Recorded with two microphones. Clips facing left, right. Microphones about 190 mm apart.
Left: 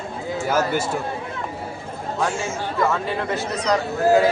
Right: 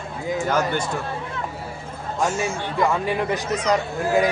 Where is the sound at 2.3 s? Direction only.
15° right (ahead or behind).